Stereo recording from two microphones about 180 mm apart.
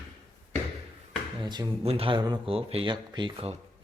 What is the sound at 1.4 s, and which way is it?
Speech, 25° right (ahead or behind).